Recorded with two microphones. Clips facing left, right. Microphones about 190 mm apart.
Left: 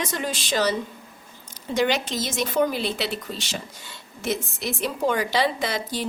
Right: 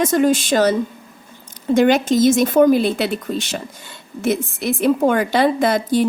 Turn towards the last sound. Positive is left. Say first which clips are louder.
# right 11 dB
turn(degrees=-55)  # may be behind; listen again after turning